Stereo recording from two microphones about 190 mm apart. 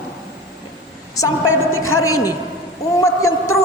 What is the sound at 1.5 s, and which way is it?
Speech, 90° left.